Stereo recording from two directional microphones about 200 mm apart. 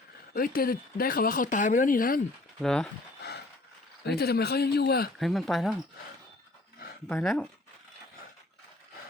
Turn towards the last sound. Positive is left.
turn(degrees=5)  # may be behind; listen again after turning